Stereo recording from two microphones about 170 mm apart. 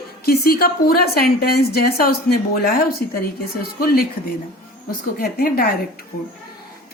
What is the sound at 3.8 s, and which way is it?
Speech, 60° left (ahead or behind).